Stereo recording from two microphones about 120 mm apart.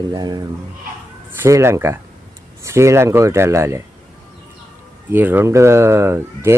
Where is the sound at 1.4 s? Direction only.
20° right (ahead or behind).